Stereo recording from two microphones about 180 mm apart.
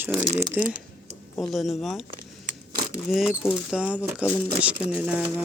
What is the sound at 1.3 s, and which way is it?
Speech, centre (ahead or behind).